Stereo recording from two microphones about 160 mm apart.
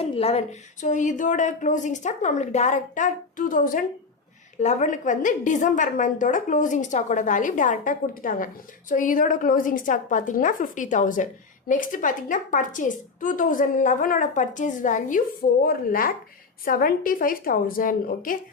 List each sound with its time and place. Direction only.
0.0 s a woman's voice: 40° left (ahead or behind)
15.6 s a woman's voice: 65° left (ahead or behind)